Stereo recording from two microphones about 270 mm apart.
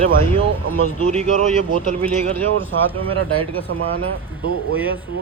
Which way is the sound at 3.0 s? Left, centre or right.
Right.